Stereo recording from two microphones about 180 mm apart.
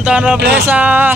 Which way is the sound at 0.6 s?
10° right (ahead or behind).